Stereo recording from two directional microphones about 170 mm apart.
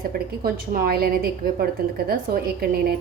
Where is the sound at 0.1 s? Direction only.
60° right (ahead or behind).